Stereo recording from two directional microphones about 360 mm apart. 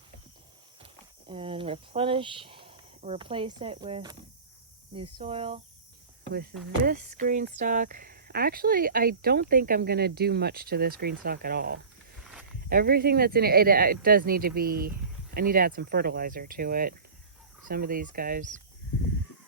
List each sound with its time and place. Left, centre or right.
1.3 s speech: centre
12.2 s snake: centre
12.6 s speech: right